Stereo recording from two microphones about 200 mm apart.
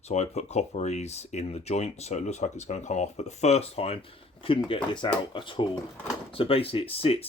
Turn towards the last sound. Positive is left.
turn(degrees=30)  # may be behind; listen again after turning